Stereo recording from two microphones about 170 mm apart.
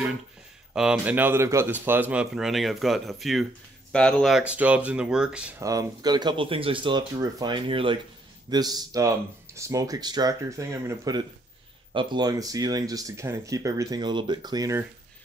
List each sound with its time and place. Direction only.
0.7 s speech: 5° right (ahead or behind)
5.6 s speech: 20° right (ahead or behind)